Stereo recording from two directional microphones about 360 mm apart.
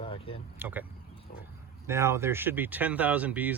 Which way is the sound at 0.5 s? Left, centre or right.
Centre.